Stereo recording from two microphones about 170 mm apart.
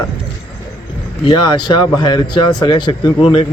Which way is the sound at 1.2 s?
25° left (ahead or behind).